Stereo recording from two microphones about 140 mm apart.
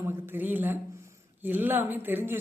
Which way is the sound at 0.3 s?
15° right (ahead or behind).